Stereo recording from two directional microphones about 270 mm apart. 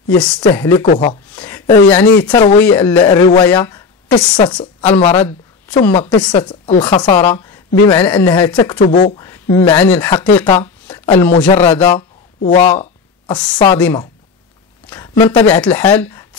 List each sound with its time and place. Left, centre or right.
0.2 s speech: centre
1.3 s a woman's voice: centre
8.7 s speech: left
9.2 s speech: centre
10.3 s a sound: centre
11.4 s speech: left
14.9 s a sound: centre
15.4 s speech: centre